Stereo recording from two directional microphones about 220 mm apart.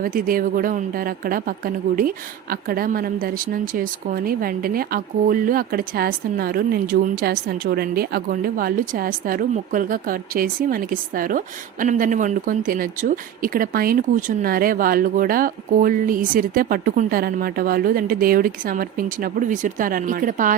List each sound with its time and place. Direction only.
0.0 s a woman's voice: 40° right (ahead or behind)